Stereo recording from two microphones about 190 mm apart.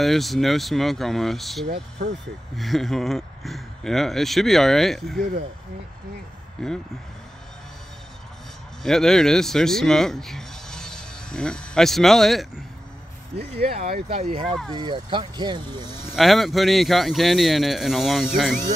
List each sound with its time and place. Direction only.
0.0 s speech: centre (ahead or behind)
1.7 s speech: 35° right (ahead or behind)
2.5 s speech: centre (ahead or behind)
6.6 s speech: 5° left (ahead or behind)
8.8 s speech: centre (ahead or behind)
13.8 s speech: 50° right (ahead or behind)
14.1 s speech: 30° right (ahead or behind)
16.1 s speech: centre (ahead or behind)